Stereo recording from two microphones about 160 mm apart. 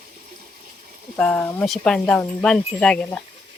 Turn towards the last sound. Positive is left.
turn(degrees=5)  # may be behind; listen again after turning